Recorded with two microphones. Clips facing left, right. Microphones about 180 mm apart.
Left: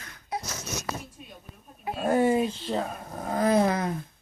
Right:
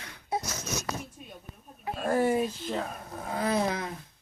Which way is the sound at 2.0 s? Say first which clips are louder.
Left 3 dB; 20° left (ahead or behind).